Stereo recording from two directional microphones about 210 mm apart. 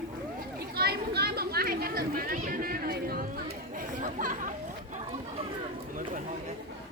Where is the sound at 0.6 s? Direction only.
50° right (ahead or behind).